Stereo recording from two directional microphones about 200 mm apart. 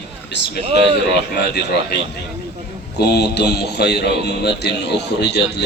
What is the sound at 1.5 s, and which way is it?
Speech, 55° left (ahead or behind).